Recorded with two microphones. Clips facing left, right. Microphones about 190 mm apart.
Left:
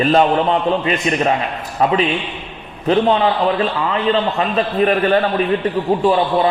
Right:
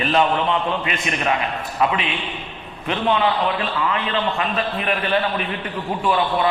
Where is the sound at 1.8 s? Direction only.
40° left (ahead or behind).